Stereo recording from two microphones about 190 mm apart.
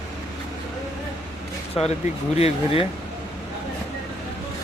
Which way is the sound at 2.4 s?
30° left (ahead or behind).